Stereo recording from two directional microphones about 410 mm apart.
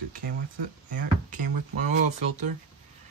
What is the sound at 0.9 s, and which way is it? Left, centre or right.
Speech, centre.